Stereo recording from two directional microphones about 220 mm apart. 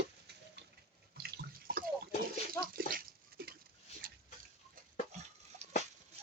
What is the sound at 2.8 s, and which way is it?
Speech, 40° right (ahead or behind).